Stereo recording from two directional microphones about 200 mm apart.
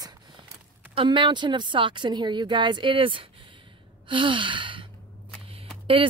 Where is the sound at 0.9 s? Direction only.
25° right (ahead or behind).